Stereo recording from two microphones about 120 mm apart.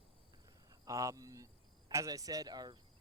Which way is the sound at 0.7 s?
30° right (ahead or behind).